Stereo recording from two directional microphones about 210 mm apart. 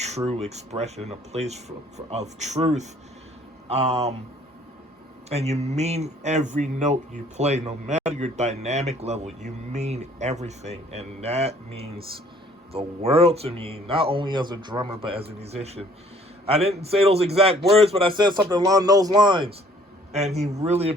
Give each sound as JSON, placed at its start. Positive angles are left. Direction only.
{"t": 0.3, "sound": "speech", "side_deg": -30}
{"t": 5.3, "sound": "speech", "side_deg": -30}